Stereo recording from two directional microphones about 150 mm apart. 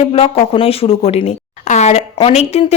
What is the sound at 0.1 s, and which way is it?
A woman's voice, 40° left (ahead or behind).